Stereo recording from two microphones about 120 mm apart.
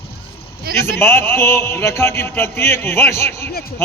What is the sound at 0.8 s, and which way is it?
Speech, 20° left (ahead or behind).